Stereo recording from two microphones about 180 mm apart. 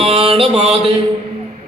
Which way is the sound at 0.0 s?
30° right (ahead or behind).